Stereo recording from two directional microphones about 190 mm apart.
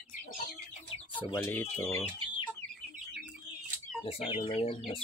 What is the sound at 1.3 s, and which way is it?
Speech, 10° left (ahead or behind).